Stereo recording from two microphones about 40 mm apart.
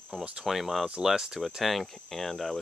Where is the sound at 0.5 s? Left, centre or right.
Centre.